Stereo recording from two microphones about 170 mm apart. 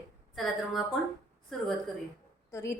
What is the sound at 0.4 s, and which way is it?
Speech, centre (ahead or behind).